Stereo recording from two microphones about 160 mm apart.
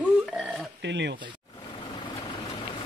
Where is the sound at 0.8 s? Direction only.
90° right.